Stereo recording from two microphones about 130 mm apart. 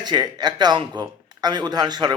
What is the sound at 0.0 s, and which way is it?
Speech, 30° right (ahead or behind).